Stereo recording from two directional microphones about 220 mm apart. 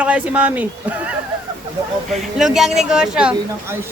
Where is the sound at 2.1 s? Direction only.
Centre (ahead or behind).